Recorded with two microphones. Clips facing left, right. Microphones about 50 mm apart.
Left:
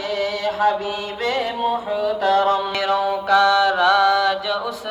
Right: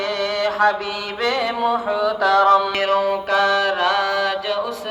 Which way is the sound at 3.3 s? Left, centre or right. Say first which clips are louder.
Left 5 dB; right.